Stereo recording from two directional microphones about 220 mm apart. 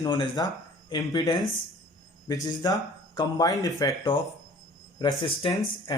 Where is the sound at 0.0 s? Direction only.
15° left (ahead or behind).